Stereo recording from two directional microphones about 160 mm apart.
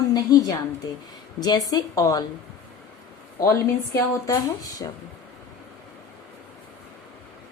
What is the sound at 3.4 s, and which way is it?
A woman's voice, 15° left (ahead or behind).